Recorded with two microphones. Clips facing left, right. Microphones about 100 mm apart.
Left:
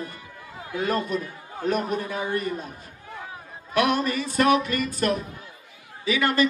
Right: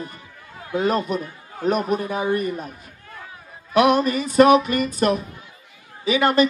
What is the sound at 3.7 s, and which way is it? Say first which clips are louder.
A woman's voice: right 6 dB; 20° right (ahead or behind).